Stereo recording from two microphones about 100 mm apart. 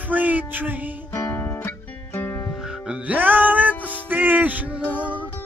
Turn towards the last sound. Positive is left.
turn(degrees=-15)  # may be behind; listen again after turning